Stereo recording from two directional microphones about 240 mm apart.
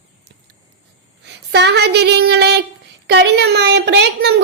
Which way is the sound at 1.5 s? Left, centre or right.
Right.